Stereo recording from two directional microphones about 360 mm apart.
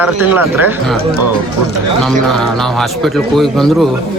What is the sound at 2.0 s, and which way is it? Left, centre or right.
Speech, centre.